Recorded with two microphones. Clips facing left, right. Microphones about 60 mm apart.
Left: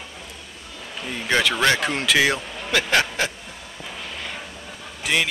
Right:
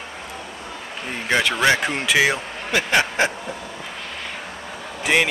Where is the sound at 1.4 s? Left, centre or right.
Centre.